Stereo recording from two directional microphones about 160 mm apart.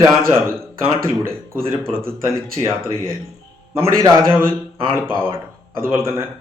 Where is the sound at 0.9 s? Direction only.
15° right (ahead or behind).